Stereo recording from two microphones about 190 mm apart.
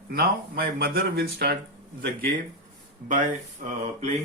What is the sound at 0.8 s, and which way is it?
Speech, 55° right (ahead or behind).